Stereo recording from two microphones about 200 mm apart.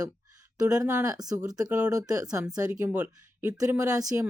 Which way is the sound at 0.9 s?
15° right (ahead or behind).